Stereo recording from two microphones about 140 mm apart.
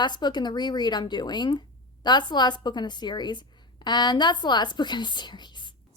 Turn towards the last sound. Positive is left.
turn(degrees=30)  # may be behind; listen again after turning